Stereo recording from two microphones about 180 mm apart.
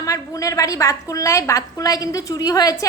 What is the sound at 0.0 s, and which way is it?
A woman's voice, 20° left (ahead or behind).